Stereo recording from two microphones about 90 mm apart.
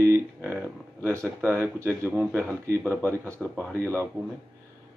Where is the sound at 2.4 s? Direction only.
30° right (ahead or behind).